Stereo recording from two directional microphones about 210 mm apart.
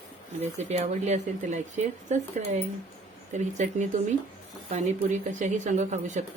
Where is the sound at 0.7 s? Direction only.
35° right (ahead or behind).